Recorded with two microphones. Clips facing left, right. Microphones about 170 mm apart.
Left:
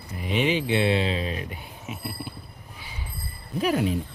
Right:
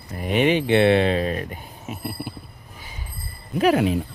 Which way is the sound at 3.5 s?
80° right.